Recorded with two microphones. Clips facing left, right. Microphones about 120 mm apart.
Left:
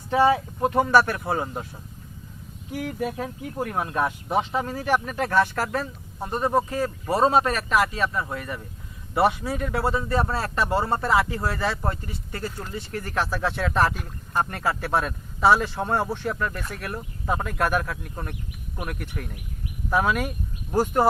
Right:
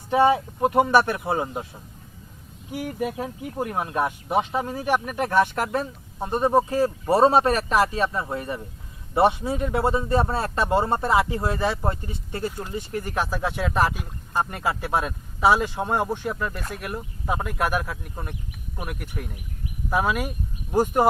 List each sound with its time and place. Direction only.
0.1 s speech: 20° right (ahead or behind)